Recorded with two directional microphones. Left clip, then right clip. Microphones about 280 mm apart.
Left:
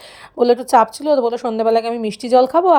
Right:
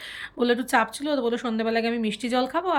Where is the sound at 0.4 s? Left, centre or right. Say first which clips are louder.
Left 10 dB; centre.